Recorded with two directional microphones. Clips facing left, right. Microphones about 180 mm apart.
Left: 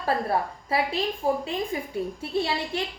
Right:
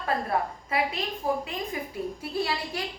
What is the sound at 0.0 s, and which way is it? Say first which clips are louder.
A woman's voice: left 2 dB; 30° left (ahead or behind).